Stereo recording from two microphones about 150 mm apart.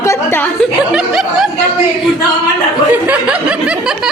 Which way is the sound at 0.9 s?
Centre (ahead or behind).